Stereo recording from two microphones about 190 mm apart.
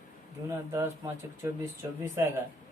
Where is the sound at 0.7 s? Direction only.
10° right (ahead or behind).